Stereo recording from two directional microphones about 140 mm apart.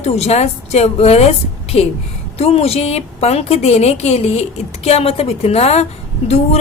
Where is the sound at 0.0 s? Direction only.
50° left (ahead or behind).